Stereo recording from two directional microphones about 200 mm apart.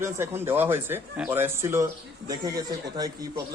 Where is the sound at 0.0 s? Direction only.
10° right (ahead or behind).